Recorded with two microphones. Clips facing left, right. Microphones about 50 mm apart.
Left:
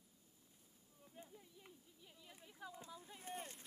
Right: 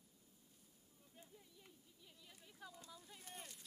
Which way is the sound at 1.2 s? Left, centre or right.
Centre.